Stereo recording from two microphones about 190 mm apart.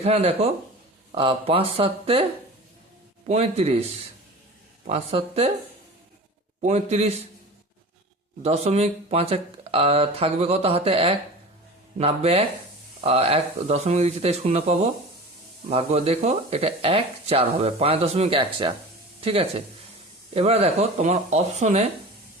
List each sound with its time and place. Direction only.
0.0 s speech: 35° right (ahead or behind)
3.2 s speech: 35° right (ahead or behind)
6.6 s speech: 35° right (ahead or behind)
8.4 s speech: 35° right (ahead or behind)